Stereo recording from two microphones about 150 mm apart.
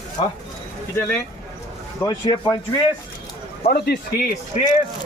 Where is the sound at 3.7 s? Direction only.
90° left.